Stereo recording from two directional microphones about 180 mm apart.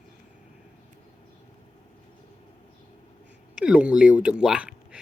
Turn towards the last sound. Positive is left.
turn(degrees=-5)  # may be behind; listen again after turning